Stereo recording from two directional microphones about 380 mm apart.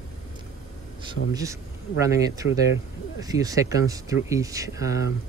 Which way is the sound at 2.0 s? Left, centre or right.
Centre.